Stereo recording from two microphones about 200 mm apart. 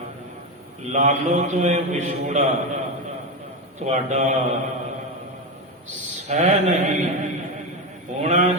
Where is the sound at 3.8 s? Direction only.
35° right (ahead or behind).